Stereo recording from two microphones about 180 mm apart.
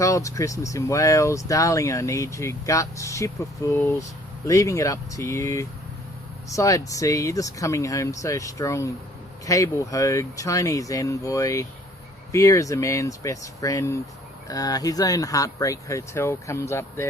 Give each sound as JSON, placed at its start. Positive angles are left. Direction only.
{"t": 0.0, "sound": "speech", "side_deg": 15}